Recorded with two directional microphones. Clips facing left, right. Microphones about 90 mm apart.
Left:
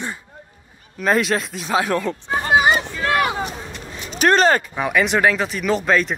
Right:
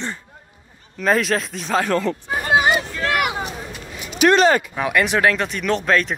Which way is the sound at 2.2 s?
25° left (ahead or behind).